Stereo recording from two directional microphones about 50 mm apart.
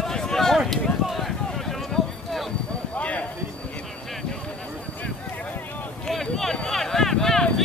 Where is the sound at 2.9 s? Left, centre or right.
Left.